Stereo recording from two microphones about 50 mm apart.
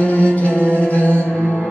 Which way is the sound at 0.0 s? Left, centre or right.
Left.